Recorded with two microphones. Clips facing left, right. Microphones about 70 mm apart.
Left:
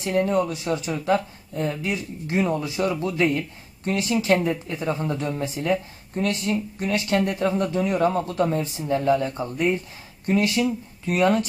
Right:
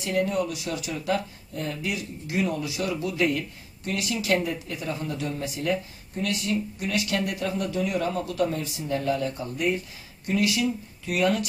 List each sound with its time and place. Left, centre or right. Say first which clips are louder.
0.0 s speech: left 4 dB; left